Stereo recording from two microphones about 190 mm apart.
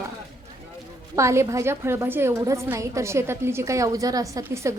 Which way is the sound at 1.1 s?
15° right (ahead or behind).